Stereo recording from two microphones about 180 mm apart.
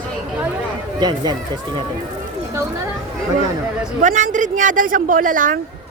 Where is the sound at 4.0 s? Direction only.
45° right (ahead or behind).